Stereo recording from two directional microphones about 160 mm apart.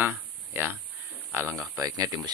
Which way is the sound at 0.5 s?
15° right (ahead or behind).